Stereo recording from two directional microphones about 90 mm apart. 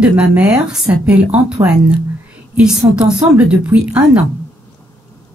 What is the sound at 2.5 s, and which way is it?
Speech, 10° right (ahead or behind).